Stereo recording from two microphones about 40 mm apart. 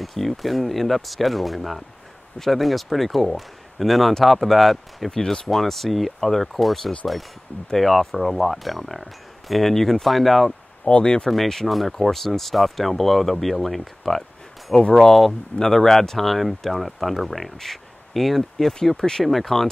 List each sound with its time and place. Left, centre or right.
0.0 s speech: centre
5.2 s speech: centre
5.5 s speech: centre
10.9 s speech: left
11.2 s speech: centre